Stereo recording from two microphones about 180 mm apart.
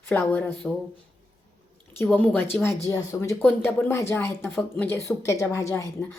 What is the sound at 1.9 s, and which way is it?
Speech, 10° left (ahead or behind).